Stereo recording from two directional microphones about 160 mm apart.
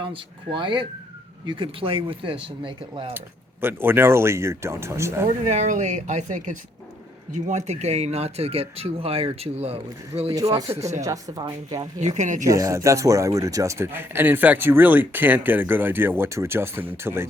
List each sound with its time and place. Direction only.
0.0 s speech: 30° right (ahead or behind)
3.2 s a man's voice: 15° right (ahead or behind)
5.4 s speech: 50° right (ahead or behind)
10.7 s a man's voice: 15° right (ahead or behind)
11.9 s speech: 45° right (ahead or behind)
12.5 s a man's voice: 20° right (ahead or behind)